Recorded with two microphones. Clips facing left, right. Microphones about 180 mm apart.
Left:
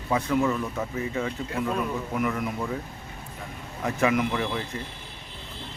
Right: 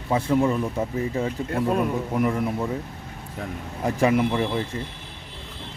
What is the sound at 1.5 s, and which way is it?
A man's voice, 45° right (ahead or behind).